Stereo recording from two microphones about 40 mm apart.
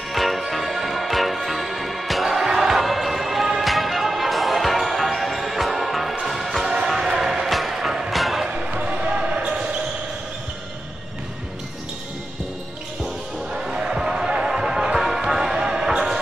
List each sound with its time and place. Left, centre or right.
0.1 s music: centre
7.4 s music: centre
8.1 s a sound: centre
8.5 s basketball bounce: right
13.6 s music: centre